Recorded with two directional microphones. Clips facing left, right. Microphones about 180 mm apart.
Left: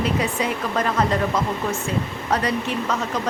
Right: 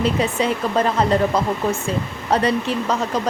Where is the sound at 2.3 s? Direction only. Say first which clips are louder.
Right 4 dB; 30° right (ahead or behind).